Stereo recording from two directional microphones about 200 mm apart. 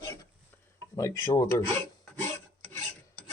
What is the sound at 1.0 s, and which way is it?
Speech, 15° left (ahead or behind).